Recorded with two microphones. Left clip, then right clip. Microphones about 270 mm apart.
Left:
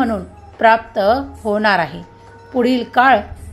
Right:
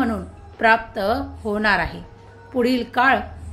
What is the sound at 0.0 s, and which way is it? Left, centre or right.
A woman's voice, centre.